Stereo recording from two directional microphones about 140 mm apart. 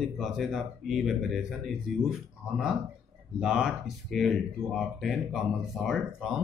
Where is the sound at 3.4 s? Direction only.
5° right (ahead or behind).